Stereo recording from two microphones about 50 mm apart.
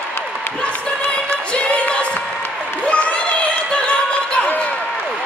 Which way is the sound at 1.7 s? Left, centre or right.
Left.